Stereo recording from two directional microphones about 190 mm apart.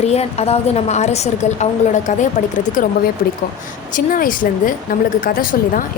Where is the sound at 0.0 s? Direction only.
35° left (ahead or behind).